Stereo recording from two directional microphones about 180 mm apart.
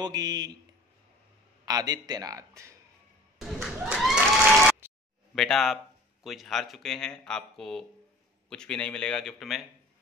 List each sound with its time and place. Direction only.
0.0 s speech: 20° right (ahead or behind)
1.7 s speech: 20° right (ahead or behind)
3.6 s applause: 5° right (ahead or behind)
4.6 s a sound: 10° right (ahead or behind)
5.3 s speech: 5° left (ahead or behind)